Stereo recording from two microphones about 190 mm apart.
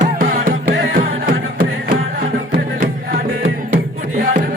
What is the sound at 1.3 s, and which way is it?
Beatboxing, 45° right (ahead or behind).